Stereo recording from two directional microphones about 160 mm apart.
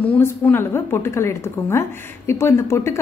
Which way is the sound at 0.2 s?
15° left (ahead or behind).